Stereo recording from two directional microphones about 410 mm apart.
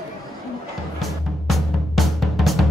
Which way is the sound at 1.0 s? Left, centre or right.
Centre.